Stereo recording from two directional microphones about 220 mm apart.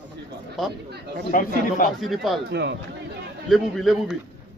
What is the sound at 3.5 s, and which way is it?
Speech, centre (ahead or behind).